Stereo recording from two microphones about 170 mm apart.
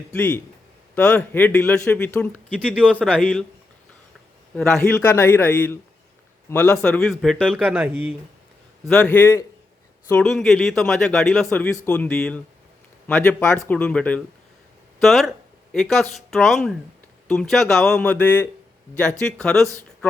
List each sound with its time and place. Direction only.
0.1 s a man's voice: 10° left (ahead or behind)
4.5 s a man's voice: 5° left (ahead or behind); by 8.1 s 10° right (ahead or behind)
8.9 s a man's voice: 10° left (ahead or behind)